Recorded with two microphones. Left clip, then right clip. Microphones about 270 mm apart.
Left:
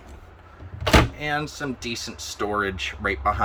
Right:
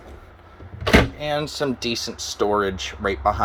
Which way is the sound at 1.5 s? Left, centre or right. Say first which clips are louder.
Right 6 dB; centre.